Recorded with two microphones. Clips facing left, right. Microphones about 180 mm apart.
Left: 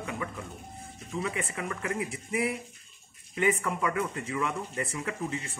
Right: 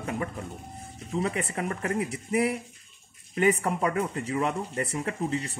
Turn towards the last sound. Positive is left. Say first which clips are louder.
# right 4 dB
turn(degrees=-35)  # may be behind; listen again after turning